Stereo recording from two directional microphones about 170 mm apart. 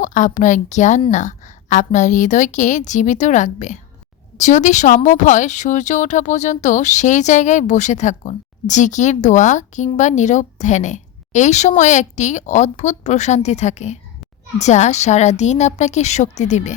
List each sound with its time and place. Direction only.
0.0 s speech: 50° left (ahead or behind)